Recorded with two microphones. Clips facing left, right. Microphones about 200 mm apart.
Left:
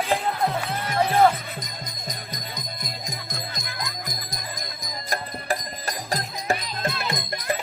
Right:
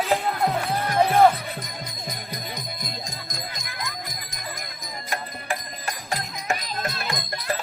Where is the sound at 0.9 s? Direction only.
15° right (ahead or behind).